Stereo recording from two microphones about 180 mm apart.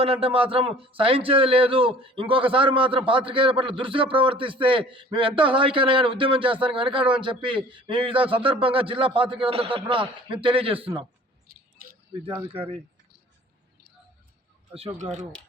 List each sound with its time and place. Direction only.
0.0 s a man's voice: 30° right (ahead or behind)
12.5 s a man's voice: 30° right (ahead or behind)
14.7 s a man's voice: 30° right (ahead or behind)